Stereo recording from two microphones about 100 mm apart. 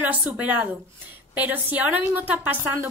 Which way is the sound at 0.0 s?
15° right (ahead or behind).